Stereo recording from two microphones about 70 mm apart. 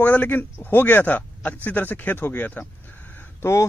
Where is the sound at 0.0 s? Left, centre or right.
Left.